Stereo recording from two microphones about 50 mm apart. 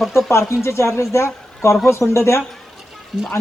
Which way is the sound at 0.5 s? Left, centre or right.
Left.